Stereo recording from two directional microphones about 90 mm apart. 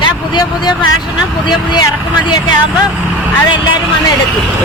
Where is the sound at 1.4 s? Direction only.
55° left (ahead or behind).